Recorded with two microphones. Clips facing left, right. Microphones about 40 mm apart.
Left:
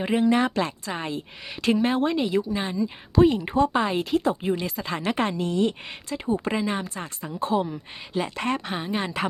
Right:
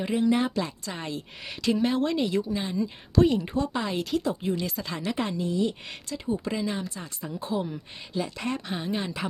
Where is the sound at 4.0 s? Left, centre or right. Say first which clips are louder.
Left 4 dB; left.